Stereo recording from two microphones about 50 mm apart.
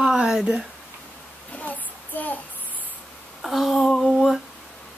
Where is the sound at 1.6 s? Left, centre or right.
Left.